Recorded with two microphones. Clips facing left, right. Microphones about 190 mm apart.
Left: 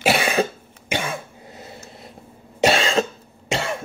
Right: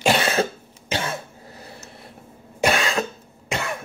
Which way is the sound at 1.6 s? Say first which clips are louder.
Left 3 dB; 20° left (ahead or behind).